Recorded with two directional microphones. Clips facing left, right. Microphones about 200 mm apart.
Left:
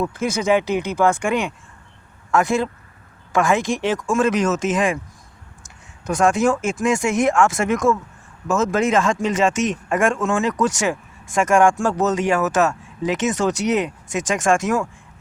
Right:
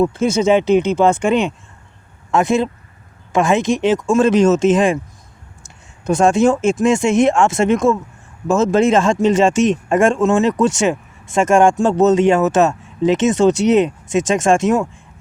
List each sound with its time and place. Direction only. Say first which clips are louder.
0.0 s speech: right 7 dB; 25° right (ahead or behind)